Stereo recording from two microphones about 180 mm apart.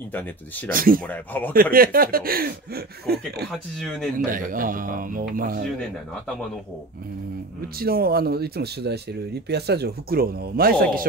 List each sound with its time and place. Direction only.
0.7 s speech: 50° right (ahead or behind)
1.0 s speech: 10° left (ahead or behind)
1.5 s speech: 55° right (ahead or behind)
3.5 s speech: centre (ahead or behind)
4.3 s speech: 50° right (ahead or behind)
7.6 s speech: 55° right (ahead or behind)